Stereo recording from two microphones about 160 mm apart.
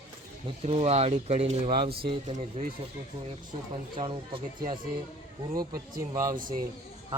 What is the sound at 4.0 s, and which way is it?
Speech, 35° right (ahead or behind).